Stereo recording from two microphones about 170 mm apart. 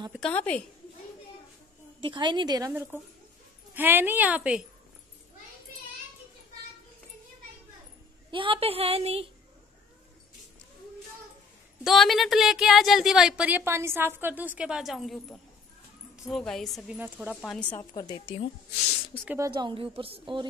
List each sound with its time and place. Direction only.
0.3 s speech: 10° left (ahead or behind)
2.0 s a woman's voice: 30° right (ahead or behind)
3.7 s a woman's voice: 10° right (ahead or behind)
8.3 s a woman's voice: 30° right (ahead or behind)
11.8 s speech: centre (ahead or behind)
17.4 s speech: 5° left (ahead or behind)
17.9 s a woman's voice: 25° left (ahead or behind)
19.2 s a woman's voice: 15° right (ahead or behind)
19.5 s a woman's voice: 30° right (ahead or behind)